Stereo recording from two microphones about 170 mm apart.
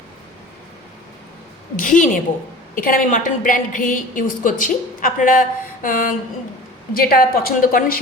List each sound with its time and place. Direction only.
1.7 s a woman's voice: 50° left (ahead or behind)